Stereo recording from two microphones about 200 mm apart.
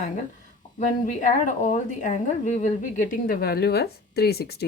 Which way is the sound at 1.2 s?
40° left (ahead or behind).